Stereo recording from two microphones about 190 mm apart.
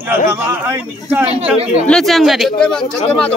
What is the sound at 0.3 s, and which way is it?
Speech, 10° right (ahead or behind).